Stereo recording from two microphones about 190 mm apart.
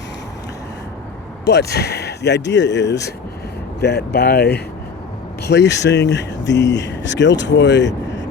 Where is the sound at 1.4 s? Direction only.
60° left (ahead or behind).